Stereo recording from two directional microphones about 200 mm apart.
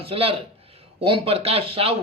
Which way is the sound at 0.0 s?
30° right (ahead or behind).